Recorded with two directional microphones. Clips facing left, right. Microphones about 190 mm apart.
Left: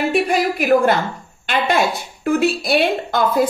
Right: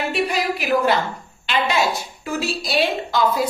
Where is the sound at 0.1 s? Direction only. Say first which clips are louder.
Left 4 dB; 50° left (ahead or behind).